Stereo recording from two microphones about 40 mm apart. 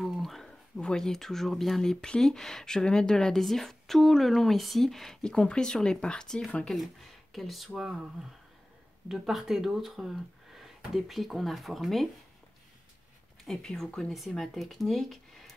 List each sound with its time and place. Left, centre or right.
0.0 s a sound: centre
0.9 s speech: centre
1.8 s speech: centre
3.3 s a woman's voice: centre
6.7 s a woman's voice: centre
13.5 s a woman's voice: centre